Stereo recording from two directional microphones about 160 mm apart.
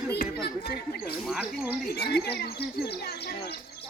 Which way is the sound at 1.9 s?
85° left.